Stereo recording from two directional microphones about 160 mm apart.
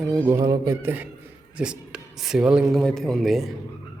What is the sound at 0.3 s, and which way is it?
A man's voice, 25° right (ahead or behind).